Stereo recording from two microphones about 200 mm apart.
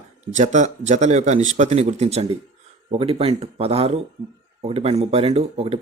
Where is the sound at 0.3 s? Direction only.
35° right (ahead or behind).